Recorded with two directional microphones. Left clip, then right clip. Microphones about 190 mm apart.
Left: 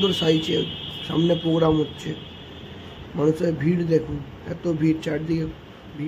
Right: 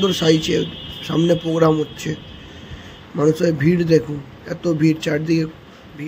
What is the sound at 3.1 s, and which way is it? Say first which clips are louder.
Speech: right 5 dB; 15° right (ahead or behind).